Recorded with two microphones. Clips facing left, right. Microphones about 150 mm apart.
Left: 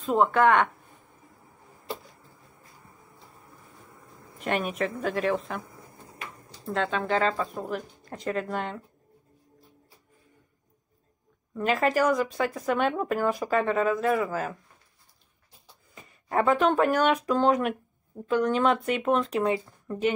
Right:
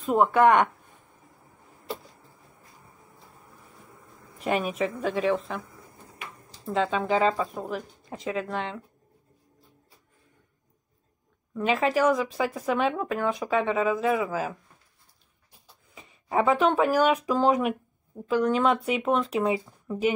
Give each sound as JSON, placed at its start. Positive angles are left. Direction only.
{"t": 0.0, "sound": "speech", "side_deg": -10}
{"t": 4.4, "sound": "speech", "side_deg": 0}
{"t": 6.6, "sound": "speech", "side_deg": -5}
{"t": 11.5, "sound": "speech", "side_deg": 0}
{"t": 16.3, "sound": "speech", "side_deg": 0}